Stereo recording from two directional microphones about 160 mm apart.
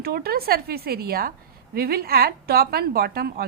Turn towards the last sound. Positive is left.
turn(degrees=-75)  # may be behind; listen again after turning